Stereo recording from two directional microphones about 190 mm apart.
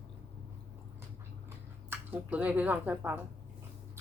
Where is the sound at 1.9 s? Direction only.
10° right (ahead or behind).